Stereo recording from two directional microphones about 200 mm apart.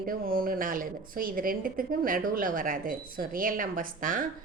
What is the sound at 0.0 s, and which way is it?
A woman's voice, 45° right (ahead or behind).